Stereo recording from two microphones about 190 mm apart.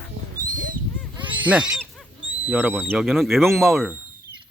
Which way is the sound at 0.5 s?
45° right (ahead or behind).